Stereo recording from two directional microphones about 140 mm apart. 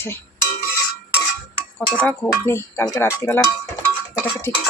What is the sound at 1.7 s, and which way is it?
Speech, 10° left (ahead or behind).